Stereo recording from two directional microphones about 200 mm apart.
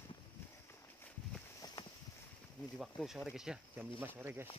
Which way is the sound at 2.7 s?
Centre (ahead or behind).